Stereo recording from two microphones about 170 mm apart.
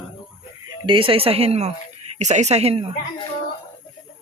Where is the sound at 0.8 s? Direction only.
30° right (ahead or behind).